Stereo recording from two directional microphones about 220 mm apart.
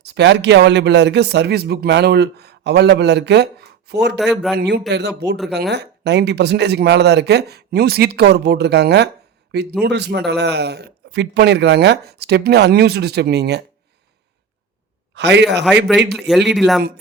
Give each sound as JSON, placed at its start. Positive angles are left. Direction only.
{"t": 0.0, "sound": "speech", "side_deg": -50}
{"t": 15.1, "sound": "a man's voice", "side_deg": -50}
{"t": 16.1, "sound": "speech", "side_deg": 0}